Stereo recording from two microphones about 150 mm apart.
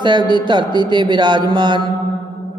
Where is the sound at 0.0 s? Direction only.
30° right (ahead or behind).